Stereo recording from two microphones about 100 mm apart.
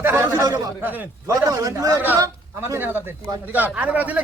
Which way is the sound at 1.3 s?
30° right (ahead or behind).